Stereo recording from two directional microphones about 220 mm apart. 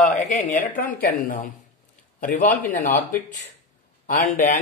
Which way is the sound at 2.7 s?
40° left (ahead or behind).